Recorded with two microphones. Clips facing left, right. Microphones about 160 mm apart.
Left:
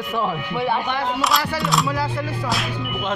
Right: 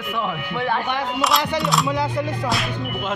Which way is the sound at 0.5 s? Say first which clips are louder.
Left 1 dB; 15° left (ahead or behind).